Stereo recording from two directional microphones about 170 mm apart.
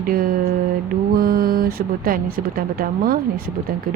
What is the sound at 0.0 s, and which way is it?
Mantra, 55° right (ahead or behind).